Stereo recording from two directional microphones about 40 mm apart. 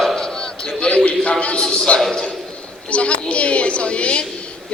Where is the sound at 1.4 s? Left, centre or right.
Left.